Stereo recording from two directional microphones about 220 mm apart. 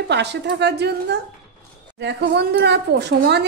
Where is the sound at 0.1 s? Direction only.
50° right (ahead or behind).